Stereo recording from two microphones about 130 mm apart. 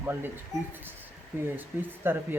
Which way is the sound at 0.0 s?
15° right (ahead or behind).